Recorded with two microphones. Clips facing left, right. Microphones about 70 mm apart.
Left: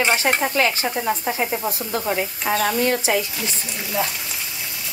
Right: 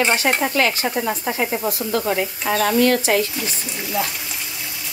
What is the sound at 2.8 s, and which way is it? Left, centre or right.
Speech, centre.